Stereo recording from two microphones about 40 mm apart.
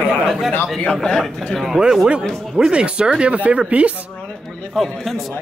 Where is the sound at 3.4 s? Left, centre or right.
Right.